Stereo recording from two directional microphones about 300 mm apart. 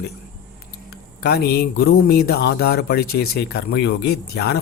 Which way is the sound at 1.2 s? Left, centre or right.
Left.